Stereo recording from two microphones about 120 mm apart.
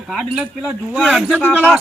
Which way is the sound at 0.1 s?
5° right (ahead or behind).